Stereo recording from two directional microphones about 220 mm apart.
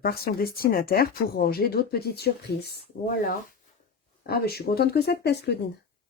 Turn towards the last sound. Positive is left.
turn(degrees=50)  # may be behind; listen again after turning